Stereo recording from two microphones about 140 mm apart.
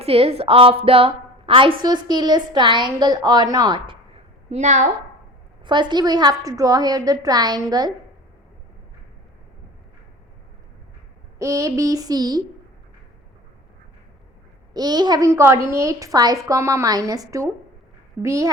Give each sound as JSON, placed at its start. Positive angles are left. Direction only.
{"t": 0.0, "sound": "a woman's voice", "side_deg": -45}
{"t": 4.5, "sound": "a woman's voice", "side_deg": -55}
{"t": 5.6, "sound": "a woman's voice", "side_deg": -35}
{"t": 11.3, "sound": "a woman's voice", "side_deg": -25}
{"t": 14.7, "sound": "a woman's voice", "side_deg": -30}